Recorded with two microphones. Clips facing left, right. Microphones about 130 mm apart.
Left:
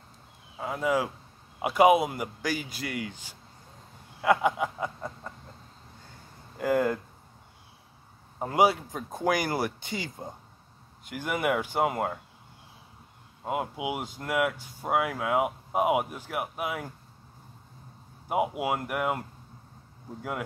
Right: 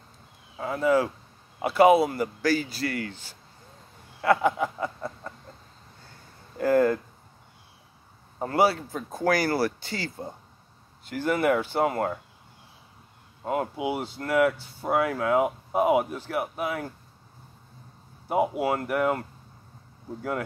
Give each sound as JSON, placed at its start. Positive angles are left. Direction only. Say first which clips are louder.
{"t": 0.6, "sound": "speech", "louder": "right 4 dB", "side_deg": 10}
{"t": 6.6, "sound": "speech", "louder": "right 4 dB", "side_deg": 15}
{"t": 8.4, "sound": "speech", "louder": "right 1 dB", "side_deg": 15}
{"t": 13.5, "sound": "speech", "louder": "right 3 dB", "side_deg": 10}
{"t": 18.6, "sound": "speech", "louder": "right 4 dB", "side_deg": 10}